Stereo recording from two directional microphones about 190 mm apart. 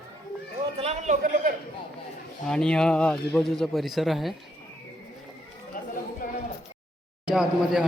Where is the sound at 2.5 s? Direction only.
5° left (ahead or behind).